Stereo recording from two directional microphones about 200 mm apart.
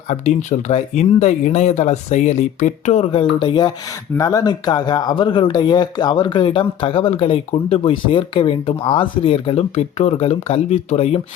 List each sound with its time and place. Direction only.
0.1 s speech: 35° left (ahead or behind)